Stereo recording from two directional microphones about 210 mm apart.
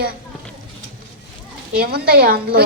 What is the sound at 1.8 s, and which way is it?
Speech, 45° right (ahead or behind).